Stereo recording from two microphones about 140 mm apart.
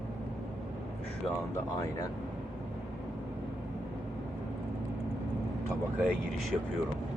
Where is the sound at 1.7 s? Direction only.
25° left (ahead or behind).